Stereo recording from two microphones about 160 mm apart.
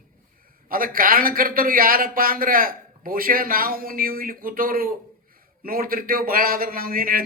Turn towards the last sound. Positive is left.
turn(degrees=-65)  # may be behind; listen again after turning